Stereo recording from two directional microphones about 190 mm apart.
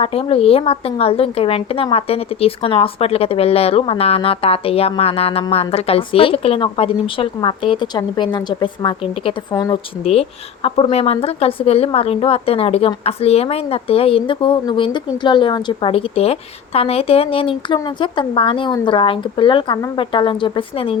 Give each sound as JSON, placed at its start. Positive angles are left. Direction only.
{"t": 0.0, "sound": "a woman's voice", "side_deg": 30}